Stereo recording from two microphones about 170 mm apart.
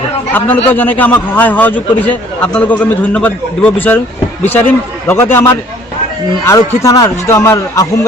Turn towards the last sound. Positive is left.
turn(degrees=20)  # may be behind; listen again after turning